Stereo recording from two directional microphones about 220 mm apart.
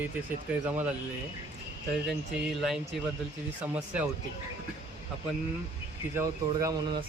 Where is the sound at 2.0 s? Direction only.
Centre (ahead or behind).